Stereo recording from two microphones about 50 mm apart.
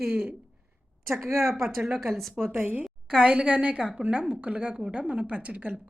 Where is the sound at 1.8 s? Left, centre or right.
Centre.